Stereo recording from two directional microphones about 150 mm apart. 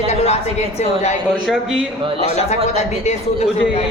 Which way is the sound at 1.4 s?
Centre (ahead or behind).